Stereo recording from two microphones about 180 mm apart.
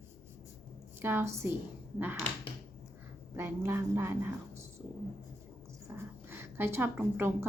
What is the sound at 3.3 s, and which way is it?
A woman's voice, 15° right (ahead or behind).